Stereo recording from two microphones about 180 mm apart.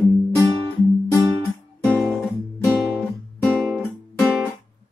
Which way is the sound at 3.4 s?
5° left (ahead or behind).